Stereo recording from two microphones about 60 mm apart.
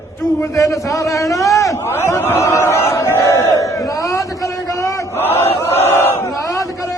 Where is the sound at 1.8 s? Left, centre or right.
Left.